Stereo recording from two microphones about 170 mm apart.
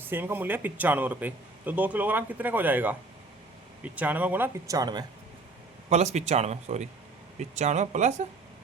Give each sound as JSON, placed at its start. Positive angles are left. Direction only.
{"t": 0.0, "sound": "speech", "side_deg": -10}
{"t": 3.9, "sound": "speech", "side_deg": -10}
{"t": 5.9, "sound": "speech", "side_deg": -40}